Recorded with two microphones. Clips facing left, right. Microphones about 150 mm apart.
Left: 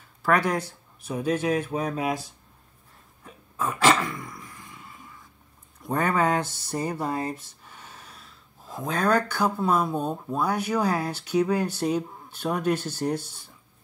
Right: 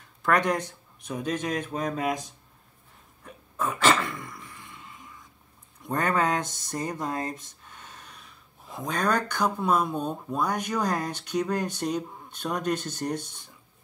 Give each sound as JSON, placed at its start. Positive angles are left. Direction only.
{"t": 0.2, "sound": "speech", "side_deg": 5}
{"t": 4.3, "sound": "a sound", "side_deg": 5}
{"t": 5.9, "sound": "speech", "side_deg": 10}